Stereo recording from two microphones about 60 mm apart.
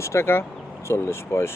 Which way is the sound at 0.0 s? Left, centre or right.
Left.